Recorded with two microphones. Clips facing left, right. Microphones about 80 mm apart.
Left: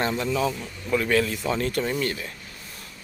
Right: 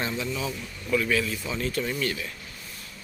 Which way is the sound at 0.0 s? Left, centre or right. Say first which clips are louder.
Left 6 dB; left.